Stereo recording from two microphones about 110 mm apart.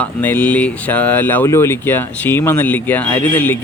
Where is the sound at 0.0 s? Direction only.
15° left (ahead or behind).